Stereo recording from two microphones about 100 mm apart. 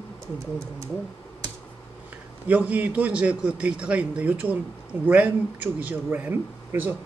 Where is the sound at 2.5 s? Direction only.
15° right (ahead or behind).